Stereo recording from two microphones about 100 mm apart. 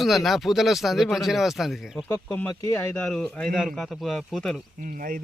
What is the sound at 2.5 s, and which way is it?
Speech, 30° left (ahead or behind).